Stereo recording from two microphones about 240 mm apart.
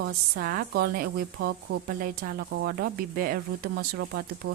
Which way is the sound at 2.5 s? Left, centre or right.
Right.